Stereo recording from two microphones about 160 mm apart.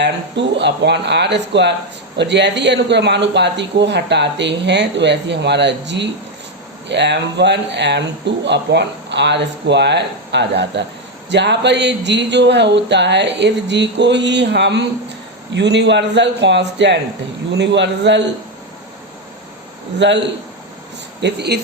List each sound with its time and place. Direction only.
0.0 s speech: 90° right
20.0 s speech: 90° right